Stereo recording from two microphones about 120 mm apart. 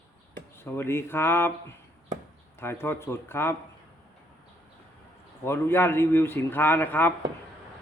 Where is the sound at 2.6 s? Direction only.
20° left (ahead or behind).